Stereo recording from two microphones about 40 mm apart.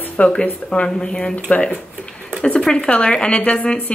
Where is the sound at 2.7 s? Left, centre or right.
Left.